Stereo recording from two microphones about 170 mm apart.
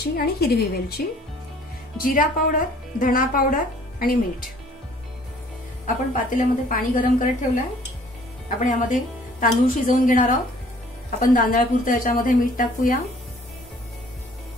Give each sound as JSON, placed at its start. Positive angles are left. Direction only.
{"t": 0.0, "sound": "speech", "side_deg": 65}
{"t": 5.9, "sound": "a woman's voice", "side_deg": 50}